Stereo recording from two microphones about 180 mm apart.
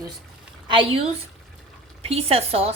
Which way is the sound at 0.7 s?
30° right (ahead or behind).